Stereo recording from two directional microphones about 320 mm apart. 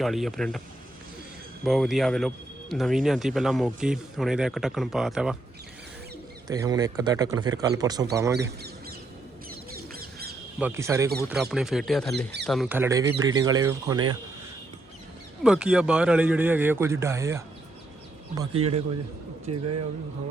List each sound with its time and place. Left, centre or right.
0.0 s speech: centre
1.6 s speech: centre
6.5 s speech: centre
8.4 s a sound: right
9.9 s bird: right
10.6 s speech: centre
15.4 s speech: centre
19.5 s speech: right